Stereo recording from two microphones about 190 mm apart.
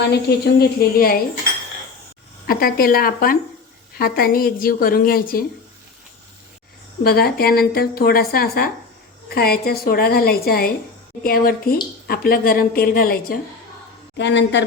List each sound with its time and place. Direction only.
0.1 s speech: 60° left (ahead or behind)
2.5 s a woman's voice: 50° left (ahead or behind)
7.0 s a woman's voice: 55° left (ahead or behind)
14.2 s speech: 70° left (ahead or behind)